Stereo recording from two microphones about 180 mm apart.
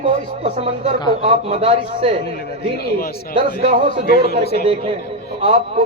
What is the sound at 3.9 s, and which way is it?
Speech, 60° left (ahead or behind).